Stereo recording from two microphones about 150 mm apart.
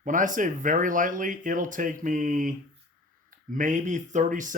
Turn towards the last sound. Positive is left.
turn(degrees=-60)  # may be behind; listen again after turning